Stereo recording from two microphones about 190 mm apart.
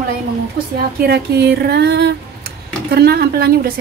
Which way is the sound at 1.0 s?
60° right (ahead or behind).